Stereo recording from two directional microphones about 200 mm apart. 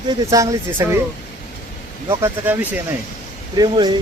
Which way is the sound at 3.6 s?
20° right (ahead or behind).